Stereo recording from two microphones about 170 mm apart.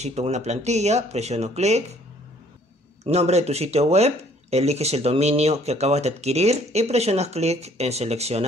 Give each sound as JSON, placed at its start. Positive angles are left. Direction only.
{"t": 0.0, "sound": "speech", "side_deg": -40}
{"t": 3.0, "sound": "speech", "side_deg": -40}